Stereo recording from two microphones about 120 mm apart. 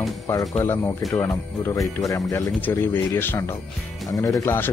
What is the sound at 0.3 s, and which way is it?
Speech, 30° left (ahead or behind).